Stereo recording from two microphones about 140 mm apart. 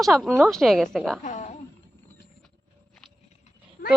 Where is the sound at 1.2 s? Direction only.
60° left (ahead or behind).